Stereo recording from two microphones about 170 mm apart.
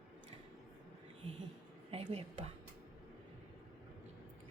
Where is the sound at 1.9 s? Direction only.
35° right (ahead or behind).